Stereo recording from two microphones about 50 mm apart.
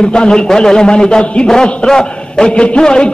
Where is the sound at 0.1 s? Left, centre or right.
Centre.